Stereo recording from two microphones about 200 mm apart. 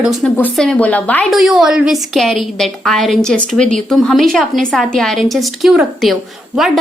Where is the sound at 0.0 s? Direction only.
Centre (ahead or behind).